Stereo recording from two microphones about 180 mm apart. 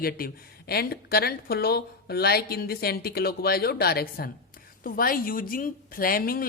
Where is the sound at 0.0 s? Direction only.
55° left (ahead or behind).